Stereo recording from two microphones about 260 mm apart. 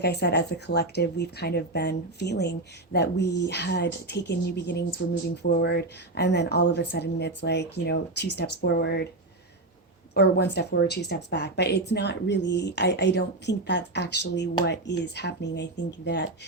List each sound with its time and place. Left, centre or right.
0.0 s speech: left
5.4 s speech: left
10.2 s speech: left